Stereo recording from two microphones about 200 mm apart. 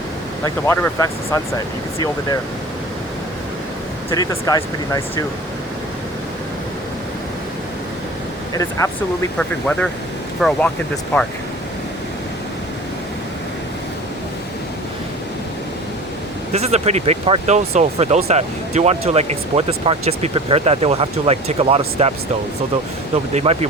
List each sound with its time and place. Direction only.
0.4 s speech: 15° left (ahead or behind)
4.1 s speech: 20° left (ahead or behind)
8.8 s speech: 15° left (ahead or behind)
16.5 s speech: 30° right (ahead or behind)
23.1 s speech: 30° right (ahead or behind)